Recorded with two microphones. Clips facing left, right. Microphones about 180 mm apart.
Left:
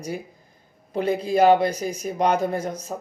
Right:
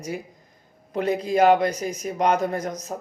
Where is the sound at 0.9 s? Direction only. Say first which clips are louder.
Left 1 dB; 30° left (ahead or behind).